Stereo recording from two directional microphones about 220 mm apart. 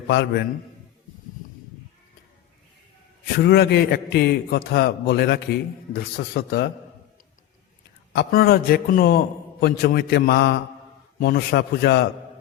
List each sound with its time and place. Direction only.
0.1 s a man's voice: 50° left (ahead or behind)
3.4 s a man's voice: 50° left (ahead or behind)
8.1 s a man's voice: 45° left (ahead or behind)